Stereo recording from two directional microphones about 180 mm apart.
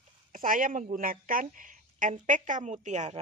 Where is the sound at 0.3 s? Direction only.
50° right (ahead or behind).